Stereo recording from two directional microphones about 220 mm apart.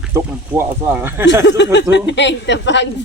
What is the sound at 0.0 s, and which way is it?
Speech, 10° right (ahead or behind).